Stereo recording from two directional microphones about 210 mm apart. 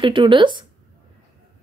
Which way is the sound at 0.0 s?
25° right (ahead or behind).